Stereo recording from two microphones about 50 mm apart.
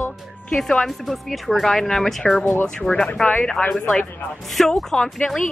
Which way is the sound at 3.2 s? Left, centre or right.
Left.